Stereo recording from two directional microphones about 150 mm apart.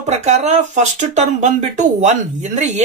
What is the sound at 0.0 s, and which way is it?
Speech, 50° right (ahead or behind).